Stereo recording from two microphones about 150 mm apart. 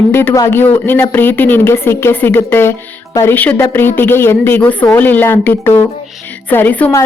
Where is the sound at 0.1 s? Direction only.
15° left (ahead or behind).